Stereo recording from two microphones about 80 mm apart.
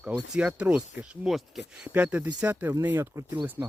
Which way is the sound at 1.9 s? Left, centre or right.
Centre.